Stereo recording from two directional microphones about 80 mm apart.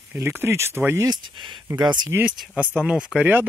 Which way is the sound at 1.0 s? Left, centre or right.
Right.